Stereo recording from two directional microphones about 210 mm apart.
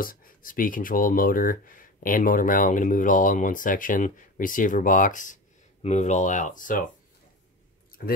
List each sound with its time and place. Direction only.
0.0 s speech: 40° left (ahead or behind)